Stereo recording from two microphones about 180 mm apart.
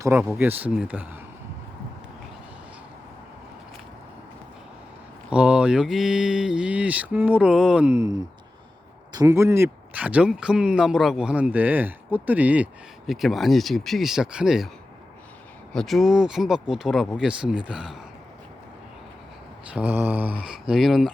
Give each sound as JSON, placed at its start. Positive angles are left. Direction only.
{"t": 0.0, "sound": "speech", "side_deg": -10}
{"t": 5.3, "sound": "mantra", "side_deg": -5}
{"t": 9.1, "sound": "speech", "side_deg": -15}
{"t": 13.1, "sound": "mantra", "side_deg": 0}
{"t": 15.7, "sound": "mantra", "side_deg": 0}
{"t": 19.7, "sound": "speech", "side_deg": -10}
{"t": 20.4, "sound": "mantra", "side_deg": -5}